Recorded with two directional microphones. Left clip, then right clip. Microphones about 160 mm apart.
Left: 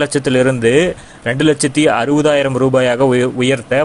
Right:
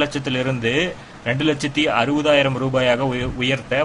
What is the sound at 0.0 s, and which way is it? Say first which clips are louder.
A man's voice: left 8 dB; 40° left (ahead or behind).